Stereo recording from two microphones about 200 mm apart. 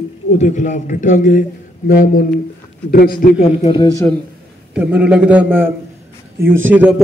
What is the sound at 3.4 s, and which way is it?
Speech, 25° left (ahead or behind).